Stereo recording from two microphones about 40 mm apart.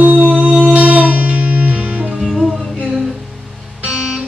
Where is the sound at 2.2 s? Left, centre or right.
Centre.